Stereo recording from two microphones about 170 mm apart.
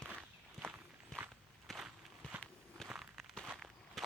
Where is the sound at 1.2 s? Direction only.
Centre (ahead or behind).